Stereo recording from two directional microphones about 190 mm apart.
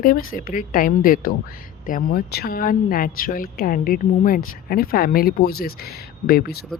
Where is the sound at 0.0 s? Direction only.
50° left (ahead or behind).